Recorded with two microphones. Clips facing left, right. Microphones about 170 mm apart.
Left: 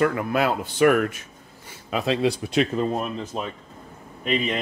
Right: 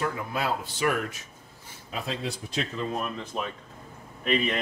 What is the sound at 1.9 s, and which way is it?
Speech, 85° left.